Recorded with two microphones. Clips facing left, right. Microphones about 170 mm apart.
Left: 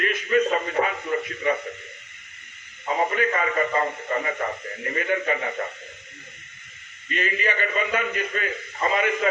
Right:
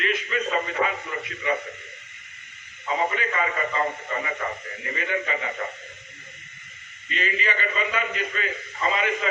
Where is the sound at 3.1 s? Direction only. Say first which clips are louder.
Left 3 dB; 45° left (ahead or behind).